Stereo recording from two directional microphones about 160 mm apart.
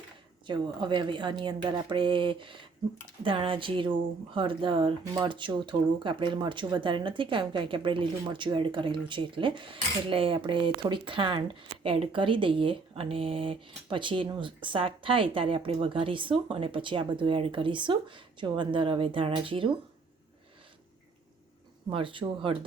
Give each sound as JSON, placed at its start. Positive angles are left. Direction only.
{"t": 0.4, "sound": "a woman's voice", "side_deg": -30}
{"t": 21.8, "sound": "speech", "side_deg": -30}